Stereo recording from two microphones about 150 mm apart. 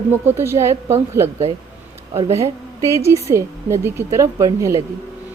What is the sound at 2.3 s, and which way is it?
A woman's voice, 20° right (ahead or behind).